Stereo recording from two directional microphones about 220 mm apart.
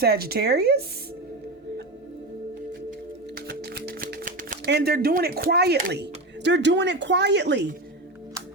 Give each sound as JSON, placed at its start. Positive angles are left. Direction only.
{"t": 0.0, "sound": "speech", "side_deg": -45}
{"t": 3.4, "sound": "music", "side_deg": -45}
{"t": 4.6, "sound": "speech", "side_deg": -50}